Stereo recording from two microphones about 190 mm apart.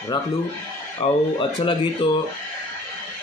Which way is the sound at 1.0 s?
25° left (ahead or behind).